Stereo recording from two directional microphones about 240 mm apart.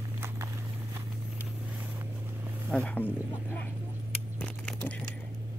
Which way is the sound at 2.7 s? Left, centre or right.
Centre.